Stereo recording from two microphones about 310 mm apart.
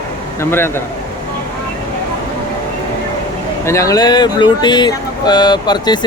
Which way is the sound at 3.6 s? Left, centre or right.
Centre.